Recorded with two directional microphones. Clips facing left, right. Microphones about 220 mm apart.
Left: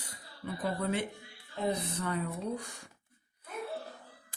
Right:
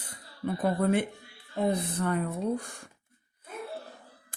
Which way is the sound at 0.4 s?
50° right (ahead or behind).